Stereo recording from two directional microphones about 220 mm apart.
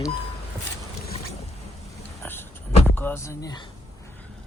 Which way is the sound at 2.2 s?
10° left (ahead or behind).